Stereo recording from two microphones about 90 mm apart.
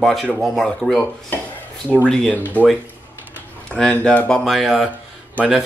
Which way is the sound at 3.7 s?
10° left (ahead or behind).